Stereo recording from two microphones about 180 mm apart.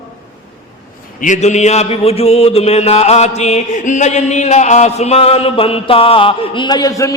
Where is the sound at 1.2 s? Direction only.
40° left (ahead or behind).